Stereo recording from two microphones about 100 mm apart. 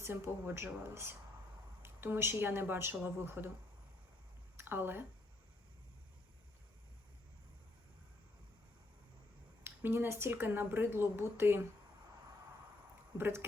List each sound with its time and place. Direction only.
0.0 s a woman's voice: 25° right (ahead or behind)
4.5 s speech: 20° right (ahead or behind)
9.6 s a woman's voice: 20° right (ahead or behind)
13.1 s a woman's voice: 25° right (ahead or behind)